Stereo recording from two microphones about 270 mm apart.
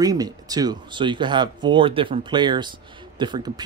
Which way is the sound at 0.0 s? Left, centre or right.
Centre.